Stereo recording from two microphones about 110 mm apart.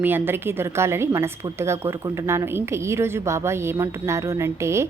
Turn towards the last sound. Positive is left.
turn(degrees=-25)  # may be behind; listen again after turning